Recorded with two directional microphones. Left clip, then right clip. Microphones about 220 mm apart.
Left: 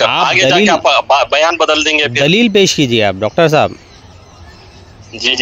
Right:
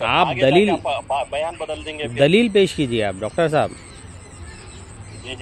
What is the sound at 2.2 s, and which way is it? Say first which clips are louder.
Speech: left 2 dB; 35° left (ahead or behind).